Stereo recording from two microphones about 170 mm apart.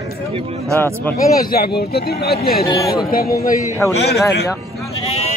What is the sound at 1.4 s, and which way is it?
Speech, 60° left (ahead or behind).